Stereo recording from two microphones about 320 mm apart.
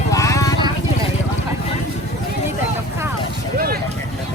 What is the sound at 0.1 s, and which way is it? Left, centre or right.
Vehicle, centre.